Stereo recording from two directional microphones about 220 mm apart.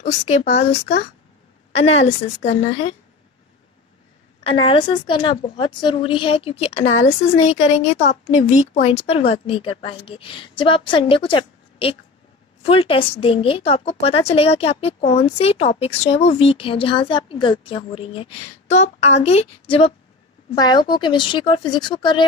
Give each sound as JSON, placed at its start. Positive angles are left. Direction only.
{"t": 0.7, "sound": "speech", "side_deg": 55}
{"t": 1.7, "sound": "a woman's voice", "side_deg": 30}
{"t": 4.4, "sound": "a woman's voice", "side_deg": 25}